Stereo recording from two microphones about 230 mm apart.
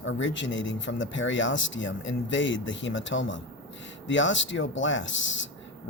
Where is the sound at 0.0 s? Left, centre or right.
Left.